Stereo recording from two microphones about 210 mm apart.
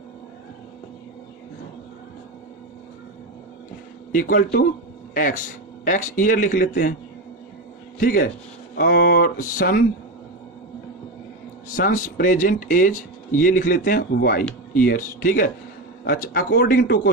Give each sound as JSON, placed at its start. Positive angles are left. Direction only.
{"t": 4.1, "sound": "speech", "side_deg": 40}
{"t": 8.0, "sound": "speech", "side_deg": 40}
{"t": 11.7, "sound": "speech", "side_deg": 40}